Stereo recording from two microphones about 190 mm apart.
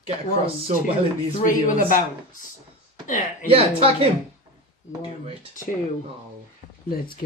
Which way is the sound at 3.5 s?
30° right (ahead or behind).